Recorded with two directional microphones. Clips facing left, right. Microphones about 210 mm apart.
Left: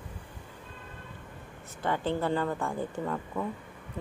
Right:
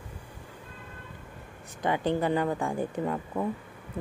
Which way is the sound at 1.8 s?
15° right (ahead or behind).